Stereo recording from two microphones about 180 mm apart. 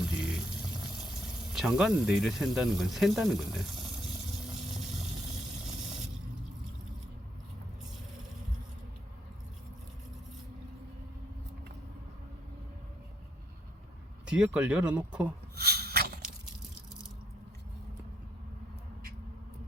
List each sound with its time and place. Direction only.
0.1 s water: centre (ahead or behind)
1.2 s speech: centre (ahead or behind)
14.3 s speech: 5° right (ahead or behind)
15.5 s a sound: 60° right (ahead or behind)